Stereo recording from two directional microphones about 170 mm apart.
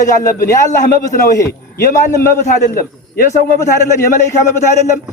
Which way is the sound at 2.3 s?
55° left (ahead or behind).